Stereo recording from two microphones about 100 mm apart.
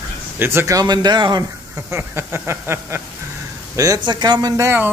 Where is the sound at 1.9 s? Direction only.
25° right (ahead or behind).